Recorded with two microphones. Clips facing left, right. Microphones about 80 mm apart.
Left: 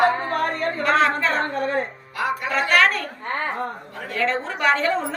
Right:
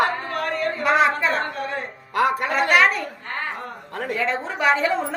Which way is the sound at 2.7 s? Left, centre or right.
Centre.